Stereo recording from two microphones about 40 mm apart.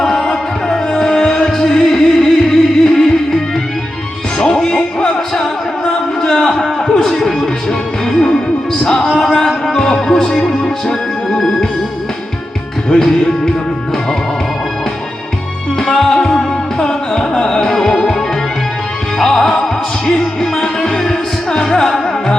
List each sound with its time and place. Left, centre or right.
0.0 s music: centre
4.4 s music: left
5.3 s music: centre
8.8 s music: left
12.9 s music: centre
15.9 s music: centre
19.2 s music: centre